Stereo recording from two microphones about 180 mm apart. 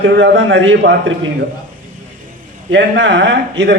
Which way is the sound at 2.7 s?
85° right.